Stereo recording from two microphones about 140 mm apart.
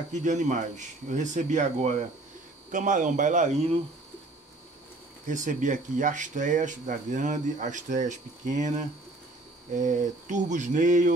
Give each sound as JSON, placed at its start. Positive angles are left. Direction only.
{"t": 0.1, "sound": "speech", "side_deg": -60}
{"t": 5.2, "sound": "speech", "side_deg": -65}